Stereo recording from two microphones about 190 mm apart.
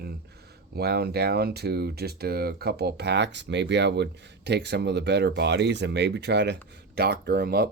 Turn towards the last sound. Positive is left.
turn(degrees=-55)  # may be behind; listen again after turning